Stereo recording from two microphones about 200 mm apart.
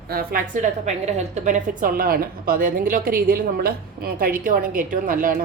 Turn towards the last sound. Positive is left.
turn(degrees=-45)  # may be behind; listen again after turning